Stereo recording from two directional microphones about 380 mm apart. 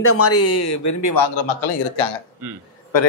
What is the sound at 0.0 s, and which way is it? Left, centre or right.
Speech, left.